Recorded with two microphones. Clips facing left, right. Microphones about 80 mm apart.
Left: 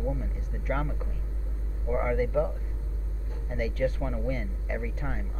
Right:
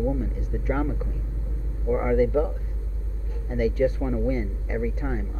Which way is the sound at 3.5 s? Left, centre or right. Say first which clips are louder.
Right 6 dB; centre.